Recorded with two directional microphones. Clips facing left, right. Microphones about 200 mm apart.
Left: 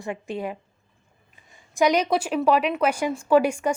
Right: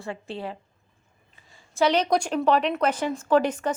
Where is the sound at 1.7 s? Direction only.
10° left (ahead or behind).